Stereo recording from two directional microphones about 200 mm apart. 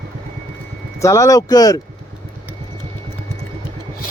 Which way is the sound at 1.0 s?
15° left (ahead or behind).